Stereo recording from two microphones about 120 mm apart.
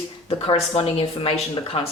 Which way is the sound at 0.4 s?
50° left (ahead or behind).